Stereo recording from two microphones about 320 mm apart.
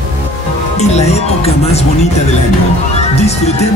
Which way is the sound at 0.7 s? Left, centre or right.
Left.